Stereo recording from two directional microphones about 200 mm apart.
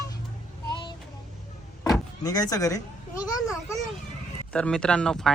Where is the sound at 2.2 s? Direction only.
20° left (ahead or behind).